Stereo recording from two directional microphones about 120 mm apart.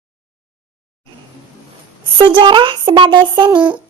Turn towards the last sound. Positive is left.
turn(degrees=-40)  # may be behind; listen again after turning